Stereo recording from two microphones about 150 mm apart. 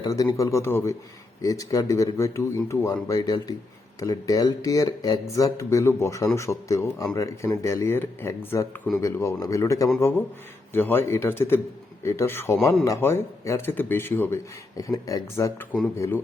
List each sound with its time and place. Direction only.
0.0 s a man's voice: 25° left (ahead or behind)